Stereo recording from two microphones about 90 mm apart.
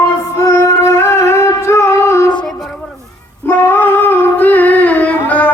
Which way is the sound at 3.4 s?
25° left (ahead or behind).